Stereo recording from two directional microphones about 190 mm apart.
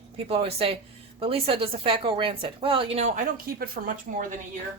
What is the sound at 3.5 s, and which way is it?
Speech, 50° right (ahead or behind).